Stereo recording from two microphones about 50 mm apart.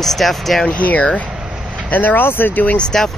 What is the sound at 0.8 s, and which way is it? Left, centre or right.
Speech, left.